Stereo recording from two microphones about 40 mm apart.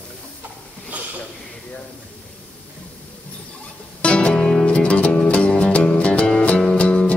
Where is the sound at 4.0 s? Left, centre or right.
Left.